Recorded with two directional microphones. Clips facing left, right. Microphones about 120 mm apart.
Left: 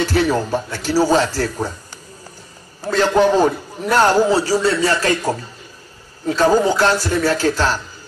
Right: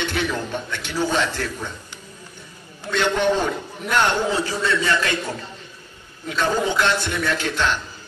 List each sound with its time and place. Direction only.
0.0 s a man's voice: 35° left (ahead or behind)
2.8 s a man's voice: 35° left (ahead or behind)